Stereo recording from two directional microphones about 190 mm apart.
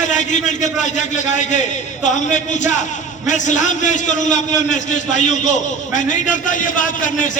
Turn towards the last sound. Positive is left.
turn(degrees=40)  # may be behind; listen again after turning